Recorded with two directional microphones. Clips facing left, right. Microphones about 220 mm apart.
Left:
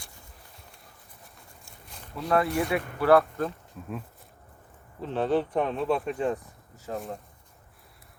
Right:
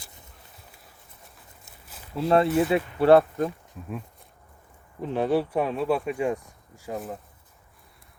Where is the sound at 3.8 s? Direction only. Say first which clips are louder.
Even; centre (ahead or behind).